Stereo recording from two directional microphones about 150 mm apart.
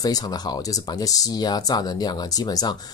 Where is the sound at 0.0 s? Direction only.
25° left (ahead or behind).